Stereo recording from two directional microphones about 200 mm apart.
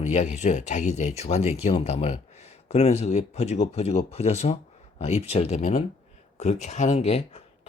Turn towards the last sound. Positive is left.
turn(degrees=30)  # may be behind; listen again after turning